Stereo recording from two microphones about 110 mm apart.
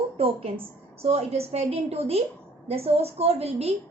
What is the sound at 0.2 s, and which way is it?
Speech, 60° right (ahead or behind).